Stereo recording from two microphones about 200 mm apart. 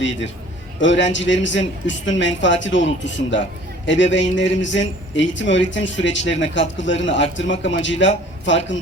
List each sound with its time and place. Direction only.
0.8 s a man's voice: 65° left (ahead or behind)